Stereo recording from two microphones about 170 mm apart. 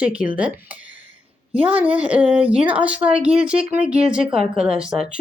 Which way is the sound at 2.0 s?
5° right (ahead or behind).